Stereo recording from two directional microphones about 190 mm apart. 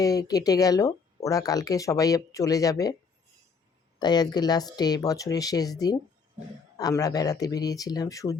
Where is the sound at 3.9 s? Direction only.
20° left (ahead or behind).